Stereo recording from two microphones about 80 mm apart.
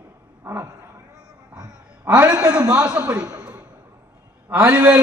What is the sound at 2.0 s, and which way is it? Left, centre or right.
A man's voice, centre.